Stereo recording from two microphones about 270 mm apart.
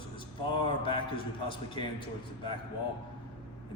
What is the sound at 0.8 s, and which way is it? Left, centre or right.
A man's voice, centre.